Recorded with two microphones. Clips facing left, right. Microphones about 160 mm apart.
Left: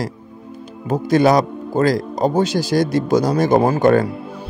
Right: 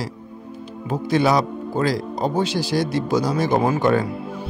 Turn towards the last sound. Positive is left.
turn(degrees=50)  # may be behind; listen again after turning